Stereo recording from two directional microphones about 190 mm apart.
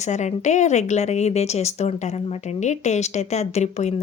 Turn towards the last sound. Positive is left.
turn(degrees=35)  # may be behind; listen again after turning